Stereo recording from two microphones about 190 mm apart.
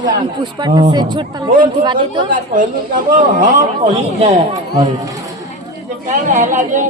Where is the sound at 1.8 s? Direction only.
25° right (ahead or behind).